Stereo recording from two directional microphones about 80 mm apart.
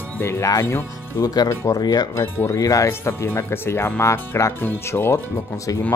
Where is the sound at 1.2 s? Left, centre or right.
Left.